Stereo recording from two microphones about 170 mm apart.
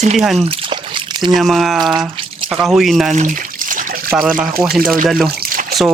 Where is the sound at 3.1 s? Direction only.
50° right (ahead or behind).